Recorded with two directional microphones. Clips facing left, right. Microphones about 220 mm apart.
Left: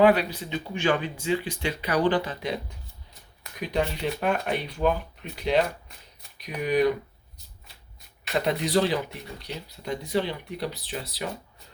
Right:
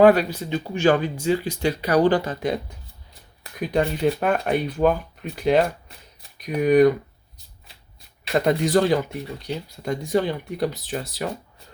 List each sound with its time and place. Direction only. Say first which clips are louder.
0.0 s speech: right 5 dB; 45° right (ahead or behind)
3.7 s speech: right 6 dB; 45° right (ahead or behind)
8.3 s speech: right 6 dB; 45° right (ahead or behind)